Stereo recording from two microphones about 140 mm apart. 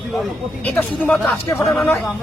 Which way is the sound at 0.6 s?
10° left (ahead or behind).